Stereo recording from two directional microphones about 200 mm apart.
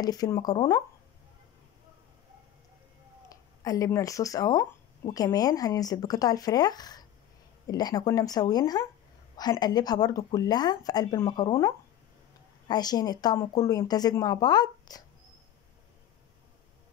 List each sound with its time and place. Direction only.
0.0 s speech: 20° left (ahead or behind)
3.3 s speech: 15° left (ahead or behind)